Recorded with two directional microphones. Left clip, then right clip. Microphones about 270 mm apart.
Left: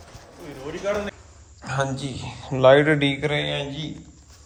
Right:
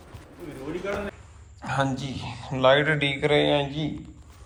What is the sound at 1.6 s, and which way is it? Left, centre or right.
Speech, centre.